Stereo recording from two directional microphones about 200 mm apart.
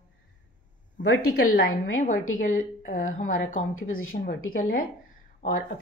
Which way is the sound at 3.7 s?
90° left.